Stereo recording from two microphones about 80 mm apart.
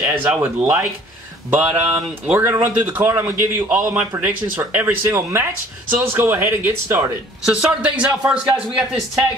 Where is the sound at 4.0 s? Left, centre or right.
Centre.